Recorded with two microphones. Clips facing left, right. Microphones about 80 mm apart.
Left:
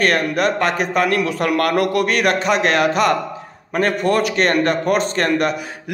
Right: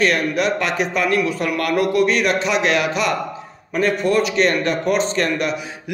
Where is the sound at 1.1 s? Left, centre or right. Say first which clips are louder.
Left 2 dB; left.